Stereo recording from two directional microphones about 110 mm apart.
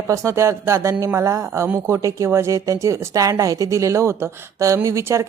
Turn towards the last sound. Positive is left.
turn(degrees=-25)  # may be behind; listen again after turning